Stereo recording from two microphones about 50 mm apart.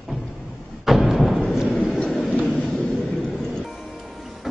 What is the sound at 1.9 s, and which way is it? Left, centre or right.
Vehicle, centre.